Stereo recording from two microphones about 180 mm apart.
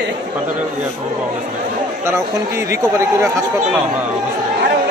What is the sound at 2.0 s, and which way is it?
Speech, 15° right (ahead or behind).